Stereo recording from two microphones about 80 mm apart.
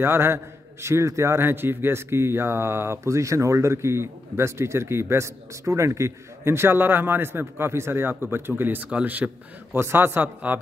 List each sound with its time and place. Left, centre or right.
0.0 s a man's voice: right